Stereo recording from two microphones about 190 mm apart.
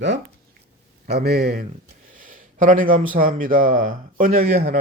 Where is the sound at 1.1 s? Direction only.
55° right (ahead or behind).